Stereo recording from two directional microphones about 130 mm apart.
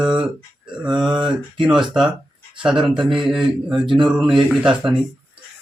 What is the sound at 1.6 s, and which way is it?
Speech, 5° right (ahead or behind).